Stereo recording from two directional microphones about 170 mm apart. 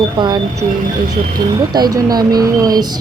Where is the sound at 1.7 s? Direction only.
25° right (ahead or behind).